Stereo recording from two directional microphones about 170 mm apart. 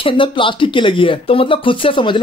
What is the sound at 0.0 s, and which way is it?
Speech, 30° left (ahead or behind).